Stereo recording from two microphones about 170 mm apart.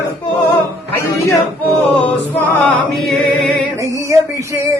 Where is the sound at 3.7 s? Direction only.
20° right (ahead or behind).